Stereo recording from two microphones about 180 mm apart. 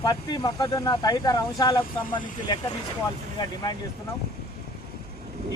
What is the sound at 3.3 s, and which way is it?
Speech, 25° left (ahead or behind).